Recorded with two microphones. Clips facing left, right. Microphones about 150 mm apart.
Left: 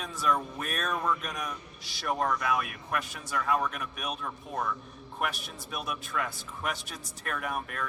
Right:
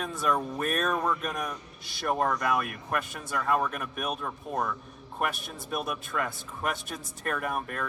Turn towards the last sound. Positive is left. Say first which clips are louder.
# right 2 dB
turn(degrees=-45)  # may be behind; listen again after turning